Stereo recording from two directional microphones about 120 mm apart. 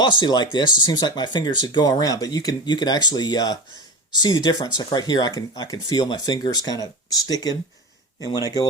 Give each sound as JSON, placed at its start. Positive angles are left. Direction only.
{"t": 0.0, "sound": "speech", "side_deg": 40}